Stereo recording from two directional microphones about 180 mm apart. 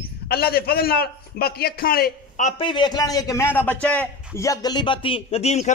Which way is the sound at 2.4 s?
30° left (ahead or behind).